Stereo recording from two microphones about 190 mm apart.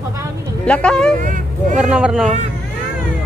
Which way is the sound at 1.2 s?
45° right (ahead or behind).